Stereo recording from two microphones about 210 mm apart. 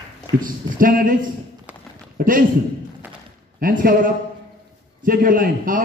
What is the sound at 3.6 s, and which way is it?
A man's voice, 40° right (ahead or behind).